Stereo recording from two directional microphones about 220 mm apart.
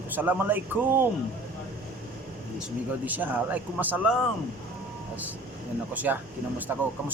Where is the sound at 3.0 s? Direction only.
5° right (ahead or behind).